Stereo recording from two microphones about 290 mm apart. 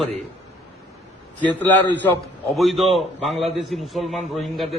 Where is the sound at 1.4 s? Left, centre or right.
Centre.